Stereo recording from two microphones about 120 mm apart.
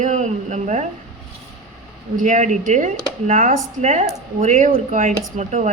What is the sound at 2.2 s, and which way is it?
Speech, 90° right.